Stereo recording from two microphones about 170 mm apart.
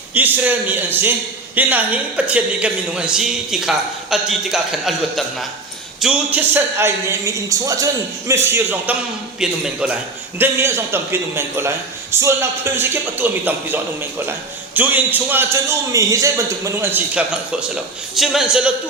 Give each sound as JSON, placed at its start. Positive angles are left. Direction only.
{"t": 0.1, "sound": "a man's voice", "side_deg": -10}